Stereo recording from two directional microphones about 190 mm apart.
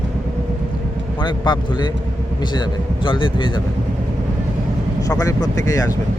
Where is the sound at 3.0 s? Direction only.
25° left (ahead or behind).